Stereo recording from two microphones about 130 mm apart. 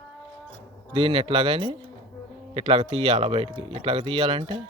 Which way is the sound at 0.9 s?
40° right (ahead or behind).